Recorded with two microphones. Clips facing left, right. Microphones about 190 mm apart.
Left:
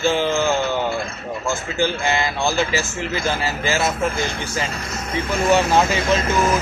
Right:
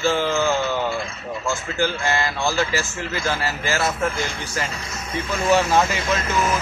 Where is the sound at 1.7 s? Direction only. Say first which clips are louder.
Left 2 dB; 20° left (ahead or behind).